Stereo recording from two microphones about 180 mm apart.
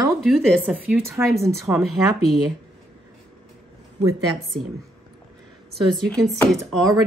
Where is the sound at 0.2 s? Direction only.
Centre (ahead or behind).